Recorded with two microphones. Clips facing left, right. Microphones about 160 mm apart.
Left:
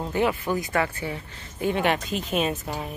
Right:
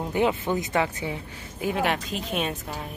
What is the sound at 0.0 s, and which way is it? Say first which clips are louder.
Speech: even; 20° right (ahead or behind).